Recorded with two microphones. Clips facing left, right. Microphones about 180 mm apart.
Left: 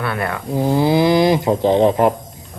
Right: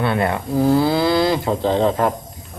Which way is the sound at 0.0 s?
25° right (ahead or behind).